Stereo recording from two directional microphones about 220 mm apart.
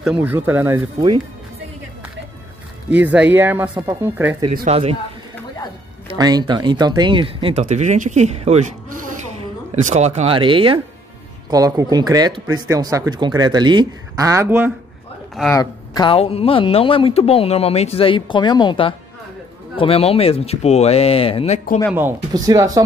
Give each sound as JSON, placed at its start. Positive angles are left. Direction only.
{"t": 0.0, "sound": "speech", "side_deg": -5}
{"t": 2.9, "sound": "speech", "side_deg": -5}
{"t": 6.1, "sound": "speech", "side_deg": -20}
{"t": 15.5, "sound": "speech", "side_deg": 20}
{"t": 21.9, "sound": "speech", "side_deg": -15}